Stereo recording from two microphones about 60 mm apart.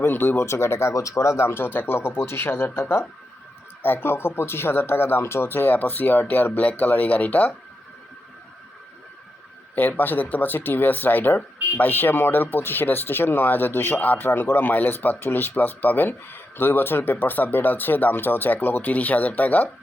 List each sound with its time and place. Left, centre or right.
0.0 s speech: left
0.9 s speech: left
9.7 s speech: left